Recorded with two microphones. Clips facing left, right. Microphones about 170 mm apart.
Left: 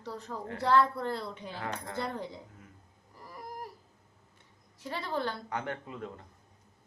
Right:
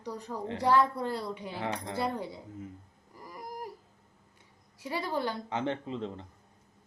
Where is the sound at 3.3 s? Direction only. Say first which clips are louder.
Right 2 dB; 10° right (ahead or behind).